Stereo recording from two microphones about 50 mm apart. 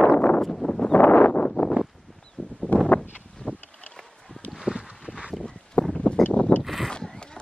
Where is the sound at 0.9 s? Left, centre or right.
Left.